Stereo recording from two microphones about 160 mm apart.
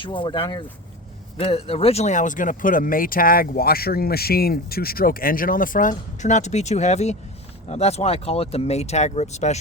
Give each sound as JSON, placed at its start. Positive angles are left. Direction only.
{"t": 0.0, "sound": "speech", "side_deg": 30}